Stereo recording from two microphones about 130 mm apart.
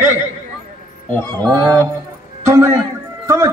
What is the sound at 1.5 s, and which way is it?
Speech, 35° right (ahead or behind).